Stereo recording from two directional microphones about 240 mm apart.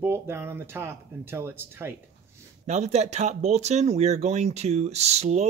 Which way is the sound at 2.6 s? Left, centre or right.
Right.